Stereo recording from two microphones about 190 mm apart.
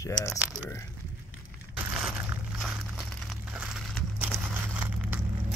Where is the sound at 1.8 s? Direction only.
5° right (ahead or behind).